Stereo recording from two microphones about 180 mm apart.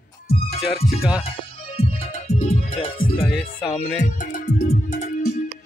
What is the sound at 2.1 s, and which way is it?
Music, 35° left (ahead or behind).